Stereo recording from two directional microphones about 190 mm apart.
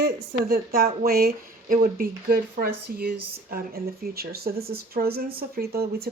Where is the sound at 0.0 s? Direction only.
55° right (ahead or behind).